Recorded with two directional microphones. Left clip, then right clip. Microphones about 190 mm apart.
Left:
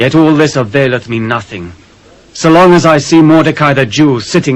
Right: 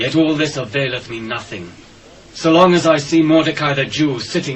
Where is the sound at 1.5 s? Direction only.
20° right (ahead or behind).